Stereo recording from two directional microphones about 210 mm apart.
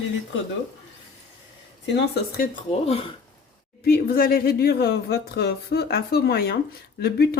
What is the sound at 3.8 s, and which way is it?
Speech, 45° left (ahead or behind).